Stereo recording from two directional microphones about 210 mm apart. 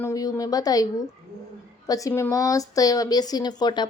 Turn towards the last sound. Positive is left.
turn(degrees=20)  # may be behind; listen again after turning